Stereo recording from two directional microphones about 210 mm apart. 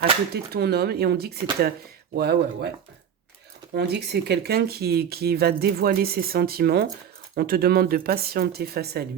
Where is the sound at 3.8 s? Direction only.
50° right (ahead or behind).